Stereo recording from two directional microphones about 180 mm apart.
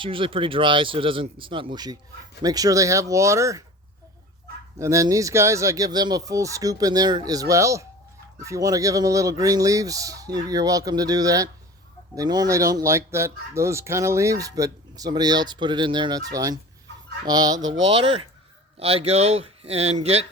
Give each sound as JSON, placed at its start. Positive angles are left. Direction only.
{"t": 0.0, "sound": "speech", "side_deg": -30}
{"t": 4.8, "sound": "speech", "side_deg": -15}
{"t": 17.7, "sound": "speech", "side_deg": -90}
{"t": 18.8, "sound": "a man's voice", "side_deg": -35}